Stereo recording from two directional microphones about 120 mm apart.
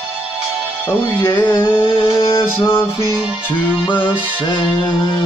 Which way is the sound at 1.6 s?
45° left (ahead or behind).